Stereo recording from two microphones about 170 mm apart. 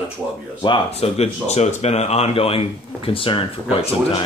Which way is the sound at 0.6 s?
30° left (ahead or behind).